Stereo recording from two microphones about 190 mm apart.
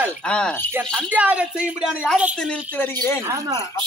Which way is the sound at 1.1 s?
5° right (ahead or behind).